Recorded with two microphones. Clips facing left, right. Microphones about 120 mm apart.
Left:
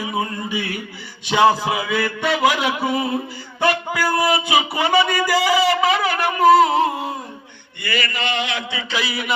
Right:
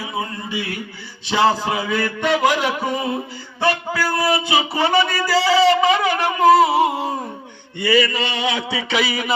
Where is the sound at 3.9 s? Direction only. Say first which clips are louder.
Left 1 dB; 20° left (ahead or behind).